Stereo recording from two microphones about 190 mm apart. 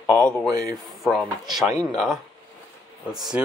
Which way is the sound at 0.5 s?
20° right (ahead or behind).